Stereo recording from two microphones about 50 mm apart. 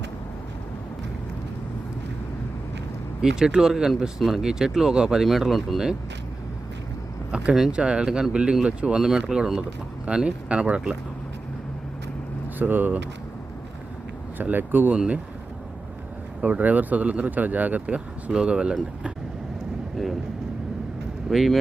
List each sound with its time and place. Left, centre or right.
3.2 s speech: centre
5.2 s speech: centre
7.3 s speech: centre
12.5 s speech: right
14.4 s speech: right
14.9 s speech: centre
16.4 s speech: right
21.2 s speech: centre